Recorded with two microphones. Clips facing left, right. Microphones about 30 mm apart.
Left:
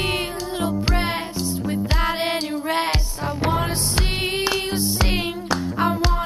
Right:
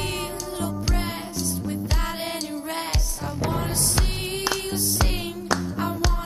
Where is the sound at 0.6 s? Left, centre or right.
Left.